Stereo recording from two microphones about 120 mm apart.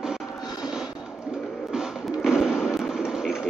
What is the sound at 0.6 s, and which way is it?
Music, 5° right (ahead or behind).